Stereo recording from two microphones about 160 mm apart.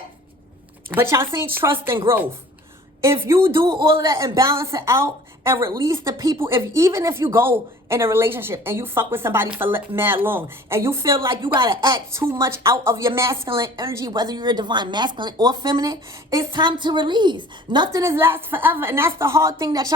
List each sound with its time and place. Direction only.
0.9 s speech: 15° right (ahead or behind)
3.0 s speech: 15° right (ahead or behind)
11.4 s a woman's voice: 30° right (ahead or behind)
18.0 s a woman's voice: 15° right (ahead or behind)